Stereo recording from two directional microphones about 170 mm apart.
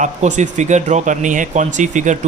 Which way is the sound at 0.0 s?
45° right (ahead or behind).